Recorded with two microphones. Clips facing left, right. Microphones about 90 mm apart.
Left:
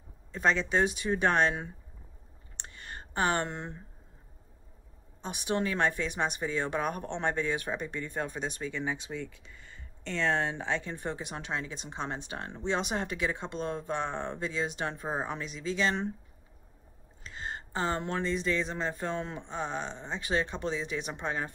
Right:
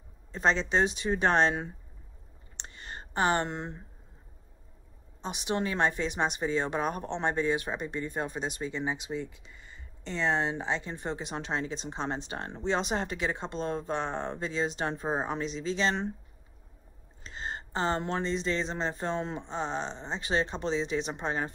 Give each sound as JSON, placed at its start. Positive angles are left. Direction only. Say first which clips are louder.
{"t": 0.3, "sound": "speech", "louder": "right 1 dB", "side_deg": -25}
{"t": 2.5, "sound": "a sound", "louder": "right 1 dB", "side_deg": -20}
{"t": 5.2, "sound": "speech", "louder": "even", "side_deg": -20}
{"t": 17.4, "sound": "speech", "louder": "right 2 dB", "side_deg": -25}